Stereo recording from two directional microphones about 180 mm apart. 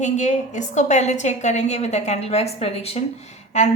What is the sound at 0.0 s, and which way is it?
A woman's voice, 40° left (ahead or behind).